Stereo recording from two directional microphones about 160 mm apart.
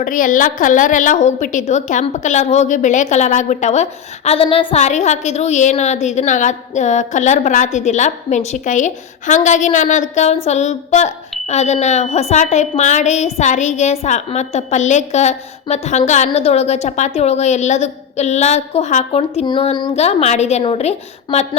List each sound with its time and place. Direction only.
0.0 s a woman's voice: 55° left (ahead or behind); by 19.9 s 30° left (ahead or behind)
20.0 s a woman's voice: 40° left (ahead or behind)